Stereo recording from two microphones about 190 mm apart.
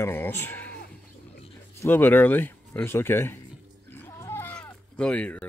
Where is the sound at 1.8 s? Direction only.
10° left (ahead or behind).